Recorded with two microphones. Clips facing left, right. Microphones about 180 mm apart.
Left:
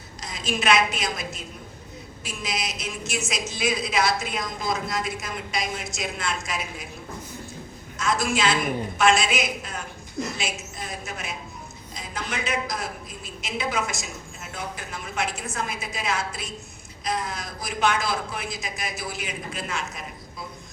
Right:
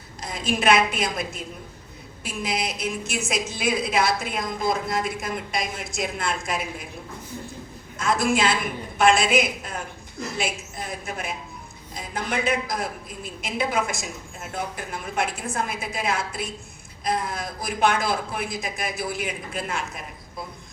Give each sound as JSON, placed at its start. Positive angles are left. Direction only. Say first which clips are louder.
{"t": 0.2, "sound": "a woman's voice", "louder": "right 3 dB", "side_deg": -55}
{"t": 7.9, "sound": "a woman's voice", "louder": "right 3 dB", "side_deg": -55}
{"t": 11.0, "sound": "a woman's voice", "louder": "right 3 dB", "side_deg": -55}